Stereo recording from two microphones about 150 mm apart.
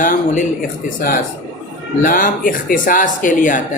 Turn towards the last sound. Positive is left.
turn(degrees=60)  # may be behind; listen again after turning